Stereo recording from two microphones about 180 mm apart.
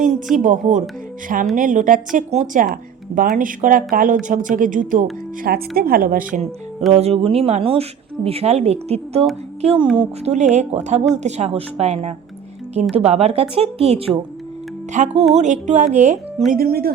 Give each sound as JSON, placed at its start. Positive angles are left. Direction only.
{"t": 0.3, "sound": "speech", "side_deg": -45}
{"t": 5.4, "sound": "speech", "side_deg": -55}
{"t": 6.9, "sound": "speech", "side_deg": -35}
{"t": 10.3, "sound": "speech", "side_deg": -40}
{"t": 16.5, "sound": "speech", "side_deg": -55}